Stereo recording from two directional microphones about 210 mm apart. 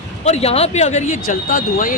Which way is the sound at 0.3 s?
30° left (ahead or behind).